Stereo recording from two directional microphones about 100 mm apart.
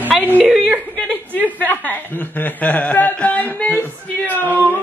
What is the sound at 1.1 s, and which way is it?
Speech, 15° left (ahead or behind).